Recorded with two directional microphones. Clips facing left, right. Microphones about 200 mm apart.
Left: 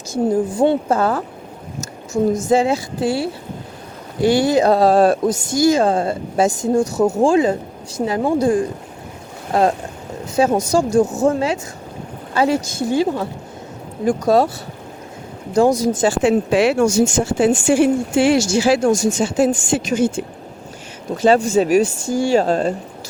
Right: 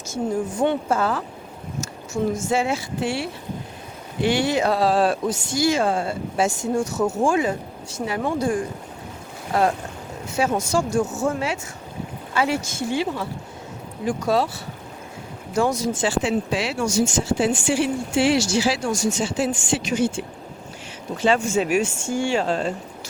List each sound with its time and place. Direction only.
0.5 s a woman's voice: 30° left (ahead or behind)
2.5 s a woman's voice: 35° left (ahead or behind)
9.5 s boat: 35° left (ahead or behind)
10.3 s a woman's voice: 35° left (ahead or behind)
15.8 s a woman's voice: 40° left (ahead or behind)